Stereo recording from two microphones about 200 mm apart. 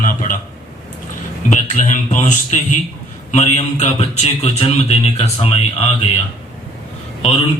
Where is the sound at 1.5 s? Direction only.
40° left (ahead or behind).